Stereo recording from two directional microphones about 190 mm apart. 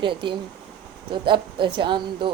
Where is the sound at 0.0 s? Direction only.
25° right (ahead or behind).